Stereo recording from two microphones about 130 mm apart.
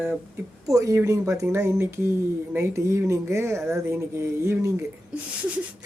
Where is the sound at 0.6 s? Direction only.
25° right (ahead or behind).